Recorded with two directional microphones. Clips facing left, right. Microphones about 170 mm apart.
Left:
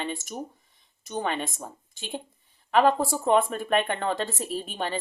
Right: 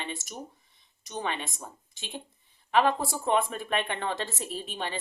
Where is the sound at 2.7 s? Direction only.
45° left (ahead or behind).